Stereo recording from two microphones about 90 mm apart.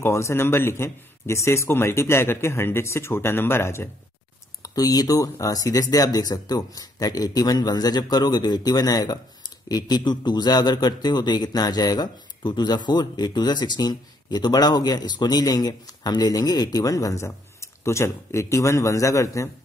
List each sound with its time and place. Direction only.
0.0 s speech: 30° left (ahead or behind)
4.6 s a man's voice: 45° left (ahead or behind)